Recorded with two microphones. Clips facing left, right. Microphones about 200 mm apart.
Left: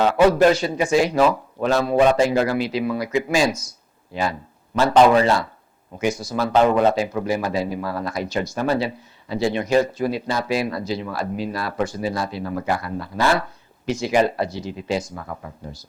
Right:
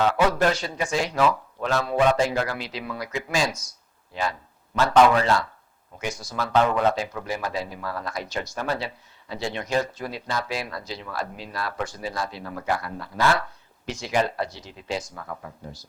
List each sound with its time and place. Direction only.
0.3 s speech: 10° left (ahead or behind)
5.2 s speech: 10° left (ahead or behind)
15.1 s speech: 20° left (ahead or behind)